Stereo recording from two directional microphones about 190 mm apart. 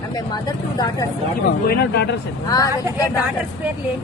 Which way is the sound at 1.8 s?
60° left (ahead or behind).